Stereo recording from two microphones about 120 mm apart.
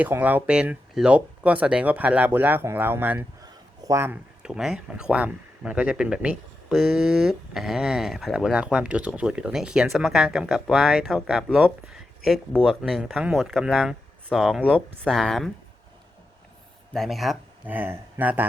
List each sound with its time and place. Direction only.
0.0 s speech: 15° right (ahead or behind)
3.4 s a sound: 30° right (ahead or behind)
4.4 s speech: 5° right (ahead or behind)
16.9 s speech: centre (ahead or behind)
17.7 s speech: 15° right (ahead or behind)